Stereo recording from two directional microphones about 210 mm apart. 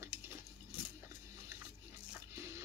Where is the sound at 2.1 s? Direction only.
15° right (ahead or behind).